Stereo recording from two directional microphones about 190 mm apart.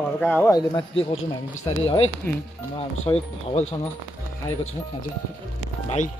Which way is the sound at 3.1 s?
35° left (ahead or behind).